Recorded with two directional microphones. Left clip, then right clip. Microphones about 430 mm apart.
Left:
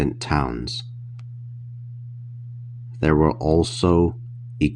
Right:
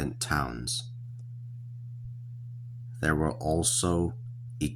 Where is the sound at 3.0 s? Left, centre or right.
Right.